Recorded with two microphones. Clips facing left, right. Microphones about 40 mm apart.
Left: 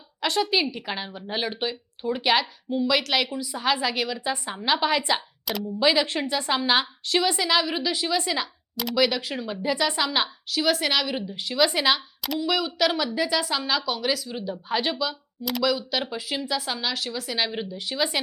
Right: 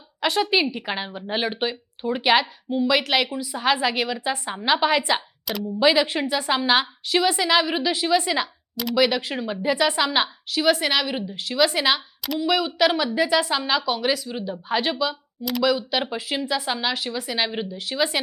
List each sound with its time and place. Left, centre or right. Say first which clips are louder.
0.2 s a woman's voice: right 3 dB; centre
9.0 s a woman's voice: right 3 dB; centre